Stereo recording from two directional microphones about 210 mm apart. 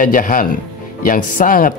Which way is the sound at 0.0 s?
40° left (ahead or behind).